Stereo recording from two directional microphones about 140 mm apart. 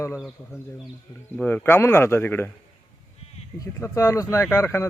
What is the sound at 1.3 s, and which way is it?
A man's voice, 10° left (ahead or behind).